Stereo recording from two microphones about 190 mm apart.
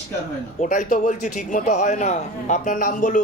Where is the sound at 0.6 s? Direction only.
40° left (ahead or behind).